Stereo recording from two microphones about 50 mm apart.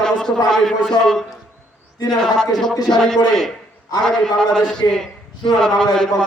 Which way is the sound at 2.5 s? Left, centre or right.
Centre.